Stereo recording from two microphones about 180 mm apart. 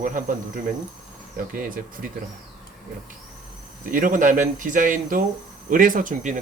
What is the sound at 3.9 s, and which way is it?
Speech, 45° right (ahead or behind).